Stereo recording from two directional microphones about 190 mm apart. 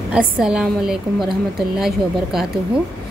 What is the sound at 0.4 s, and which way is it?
A woman's voice, centre (ahead or behind).